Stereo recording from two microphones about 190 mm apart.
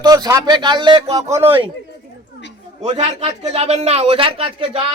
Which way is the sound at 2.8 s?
35° right (ahead or behind).